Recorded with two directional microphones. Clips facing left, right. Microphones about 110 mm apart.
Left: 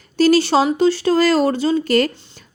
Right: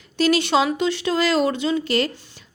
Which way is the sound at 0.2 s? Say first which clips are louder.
Left 4 dB; 35° left (ahead or behind).